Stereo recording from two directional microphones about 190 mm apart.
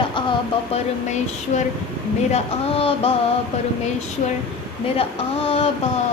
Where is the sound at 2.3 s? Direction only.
30° left (ahead or behind).